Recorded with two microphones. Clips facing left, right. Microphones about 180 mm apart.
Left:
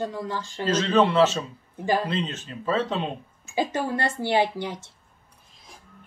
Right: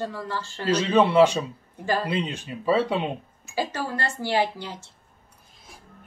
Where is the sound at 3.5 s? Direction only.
20° left (ahead or behind).